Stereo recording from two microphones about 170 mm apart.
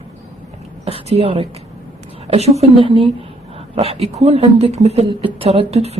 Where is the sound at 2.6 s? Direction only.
30° right (ahead or behind).